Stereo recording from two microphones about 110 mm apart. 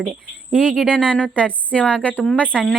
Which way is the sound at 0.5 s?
5° left (ahead or behind).